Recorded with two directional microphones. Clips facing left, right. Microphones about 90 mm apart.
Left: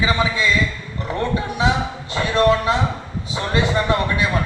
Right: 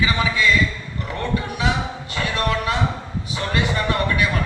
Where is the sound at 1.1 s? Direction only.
25° left (ahead or behind).